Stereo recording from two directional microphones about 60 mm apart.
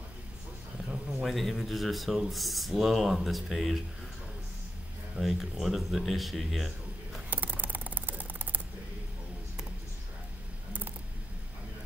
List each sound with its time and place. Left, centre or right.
1.2 s speech: centre
5.1 s speech: centre
7.2 s mechanisms: right